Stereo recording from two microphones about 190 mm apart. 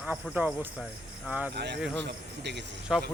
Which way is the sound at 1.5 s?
60° right (ahead or behind).